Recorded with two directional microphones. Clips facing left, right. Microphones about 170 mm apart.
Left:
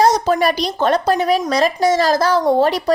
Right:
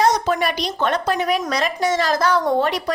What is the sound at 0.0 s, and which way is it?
Speech, 35° left (ahead or behind).